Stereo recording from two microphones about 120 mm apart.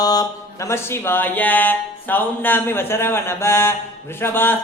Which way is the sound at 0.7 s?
20° left (ahead or behind).